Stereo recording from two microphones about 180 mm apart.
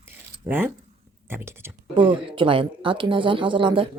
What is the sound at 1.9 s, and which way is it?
Speech, 30° right (ahead or behind).